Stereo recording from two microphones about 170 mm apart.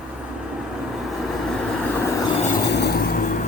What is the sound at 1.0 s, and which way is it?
Vehicle, centre (ahead or behind).